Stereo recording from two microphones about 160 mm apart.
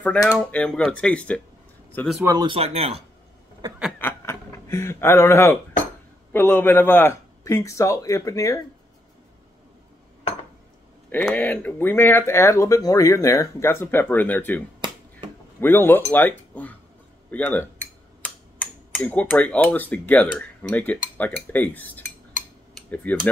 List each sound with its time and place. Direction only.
0.3 s speech: 5° left (ahead or behind)
2.2 s speech: 30° right (ahead or behind)
4.0 s a sound: 15° left (ahead or behind)
6.3 s speech: 15° left (ahead or behind)
11.1 s speech: 10° left (ahead or behind)
15.6 s speech: 15° left (ahead or behind)
23.1 s speech: 10° left (ahead or behind)